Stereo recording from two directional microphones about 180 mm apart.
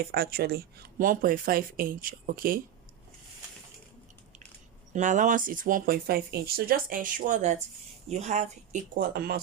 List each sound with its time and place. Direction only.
0.0 s speech: 60° right (ahead or behind)
4.9 s speech: 45° right (ahead or behind)